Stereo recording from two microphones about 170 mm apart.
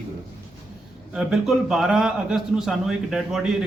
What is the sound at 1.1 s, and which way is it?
Speech, centre (ahead or behind).